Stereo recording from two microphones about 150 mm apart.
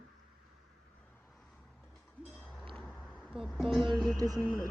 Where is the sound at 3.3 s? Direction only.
Centre (ahead or behind).